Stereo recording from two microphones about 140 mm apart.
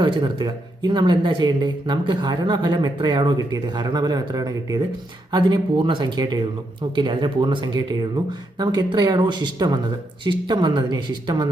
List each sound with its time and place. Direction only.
0.0 s speech: 35° right (ahead or behind)